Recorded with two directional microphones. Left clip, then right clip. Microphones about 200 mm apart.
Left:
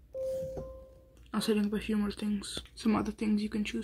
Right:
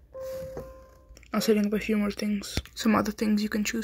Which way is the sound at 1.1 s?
15° right (ahead or behind).